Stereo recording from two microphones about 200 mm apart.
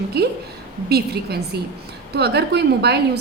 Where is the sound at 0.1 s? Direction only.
55° right (ahead or behind).